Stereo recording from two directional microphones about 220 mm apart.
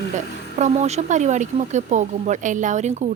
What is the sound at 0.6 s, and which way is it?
A woman's voice, 30° right (ahead or behind).